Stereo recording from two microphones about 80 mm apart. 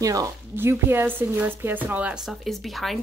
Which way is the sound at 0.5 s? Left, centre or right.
Right.